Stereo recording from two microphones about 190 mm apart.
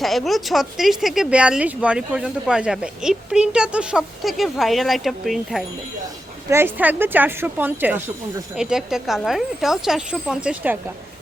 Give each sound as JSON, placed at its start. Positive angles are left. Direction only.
{"t": 0.0, "sound": "a woman's voice", "side_deg": 0}